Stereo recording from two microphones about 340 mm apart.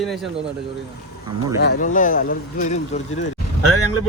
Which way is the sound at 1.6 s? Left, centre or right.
Left.